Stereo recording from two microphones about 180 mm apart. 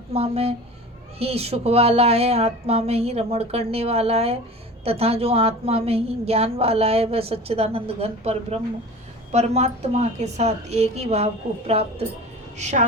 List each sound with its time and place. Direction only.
0.1 s a woman's voice: 35° right (ahead or behind)